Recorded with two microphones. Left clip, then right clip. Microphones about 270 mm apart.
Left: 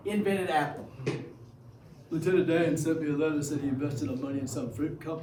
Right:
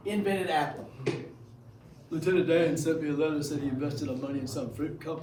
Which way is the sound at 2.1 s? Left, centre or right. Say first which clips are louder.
Right 1 dB; centre.